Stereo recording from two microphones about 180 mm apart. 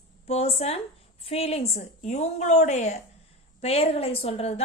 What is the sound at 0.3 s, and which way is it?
Speech, 35° left (ahead or behind).